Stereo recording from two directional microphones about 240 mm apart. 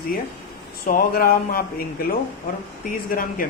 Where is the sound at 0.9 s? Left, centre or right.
Left.